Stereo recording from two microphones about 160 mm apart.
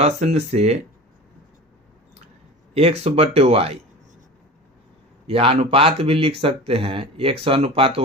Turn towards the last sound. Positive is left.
turn(degrees=-35)  # may be behind; listen again after turning